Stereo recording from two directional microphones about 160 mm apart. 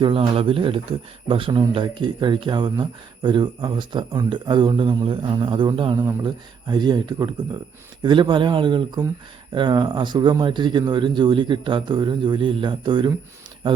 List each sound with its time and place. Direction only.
0.0 s speech: 30° right (ahead or behind)
6.0 s speech: 15° right (ahead or behind)
6.2 s speech: 25° right (ahead or behind)